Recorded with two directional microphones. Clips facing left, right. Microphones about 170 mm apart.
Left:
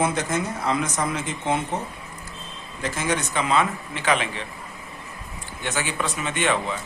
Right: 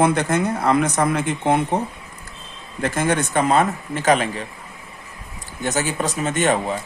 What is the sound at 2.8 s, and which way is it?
Speech, 55° right (ahead or behind).